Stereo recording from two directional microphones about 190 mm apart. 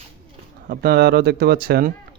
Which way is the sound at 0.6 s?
55° right (ahead or behind).